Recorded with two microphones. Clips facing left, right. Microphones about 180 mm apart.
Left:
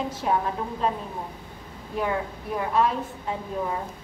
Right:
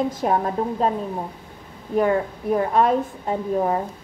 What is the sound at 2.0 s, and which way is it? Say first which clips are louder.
A woman's voice: right 7 dB; 50° right (ahead or behind).